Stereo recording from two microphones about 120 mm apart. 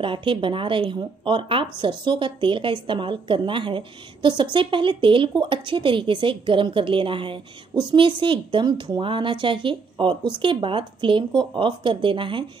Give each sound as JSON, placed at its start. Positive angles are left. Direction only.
{"t": 0.0, "sound": "a woman's voice", "side_deg": -45}